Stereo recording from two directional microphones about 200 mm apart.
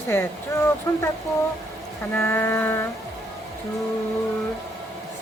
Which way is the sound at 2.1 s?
10° left (ahead or behind).